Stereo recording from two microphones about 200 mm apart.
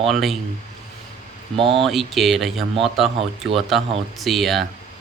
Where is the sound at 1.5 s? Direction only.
25° right (ahead or behind).